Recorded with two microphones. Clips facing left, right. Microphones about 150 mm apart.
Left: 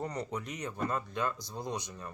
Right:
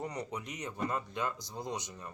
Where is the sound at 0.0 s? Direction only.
20° right (ahead or behind).